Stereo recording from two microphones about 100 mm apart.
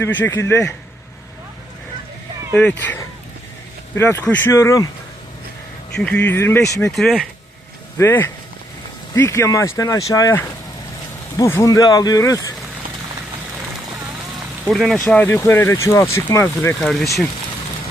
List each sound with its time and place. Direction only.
0.0 s speech: 25° left (ahead or behind)
2.6 s speech: 10° left (ahead or behind)
3.9 s speech: 25° left (ahead or behind)
4.2 s speech: 15° left (ahead or behind)
4.5 s speech: 30° left (ahead or behind)
6.0 s speech: 15° left (ahead or behind)
6.9 s speech: centre (ahead or behind)
7.9 s speech: 25° left (ahead or behind)
11.3 s speech: 30° left (ahead or behind)
14.7 s speech: centre (ahead or behind)
15.1 s speech: 20° left (ahead or behind)
15.4 s speech: 30° left (ahead or behind)
16.8 s speech: centre (ahead or behind)